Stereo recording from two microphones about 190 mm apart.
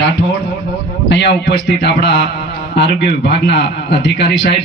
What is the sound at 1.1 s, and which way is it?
A man's voice, 70° left (ahead or behind).